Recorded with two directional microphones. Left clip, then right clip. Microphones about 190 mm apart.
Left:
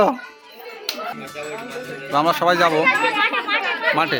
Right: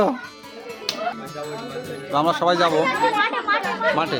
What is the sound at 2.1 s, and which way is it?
Speech, 10° left (ahead or behind).